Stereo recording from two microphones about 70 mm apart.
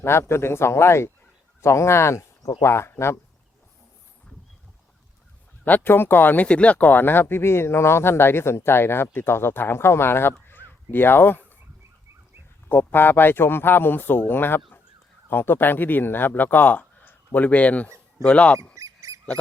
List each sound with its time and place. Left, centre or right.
0.0 s speech: left
5.6 s speech: left
10.4 s a sound: left
12.6 s speech: left
18.7 s duck: right